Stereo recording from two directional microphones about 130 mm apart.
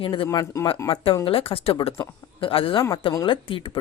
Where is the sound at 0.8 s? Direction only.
25° left (ahead or behind).